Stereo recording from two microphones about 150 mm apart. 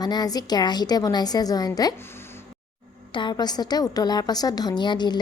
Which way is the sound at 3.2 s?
30° left (ahead or behind).